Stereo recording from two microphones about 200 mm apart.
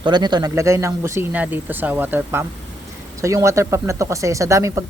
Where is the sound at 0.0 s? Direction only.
20° right (ahead or behind).